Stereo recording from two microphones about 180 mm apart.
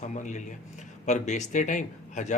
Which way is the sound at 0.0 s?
40° left (ahead or behind).